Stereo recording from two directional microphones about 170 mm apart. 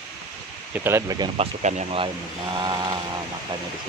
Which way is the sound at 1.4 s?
45° right (ahead or behind).